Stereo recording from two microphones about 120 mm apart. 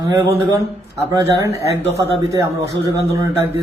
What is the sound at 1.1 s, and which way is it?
Speech, 30° right (ahead or behind).